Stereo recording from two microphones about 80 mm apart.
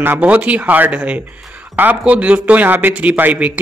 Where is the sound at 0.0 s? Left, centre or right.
Right.